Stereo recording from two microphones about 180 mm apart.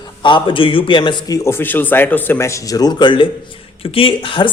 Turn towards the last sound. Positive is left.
turn(degrees=30)  # may be behind; listen again after turning